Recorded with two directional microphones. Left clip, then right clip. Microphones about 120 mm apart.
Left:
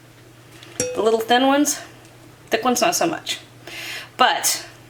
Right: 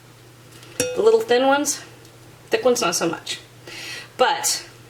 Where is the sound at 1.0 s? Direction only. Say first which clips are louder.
Right 1 dB; 20° left (ahead or behind).